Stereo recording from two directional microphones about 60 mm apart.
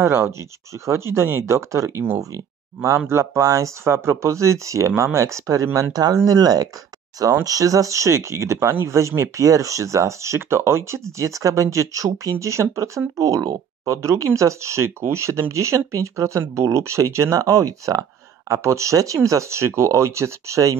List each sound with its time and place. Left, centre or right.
0.0 s speech: right
0.3 s speech: right
1.4 s speech: right
3.8 s speech: right
6.2 s speech: right
7.4 s speech: right
17.4 s speech: right
18.5 s speech: right